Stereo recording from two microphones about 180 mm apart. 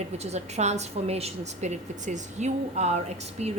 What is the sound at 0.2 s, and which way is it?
A woman's voice, 35° right (ahead or behind).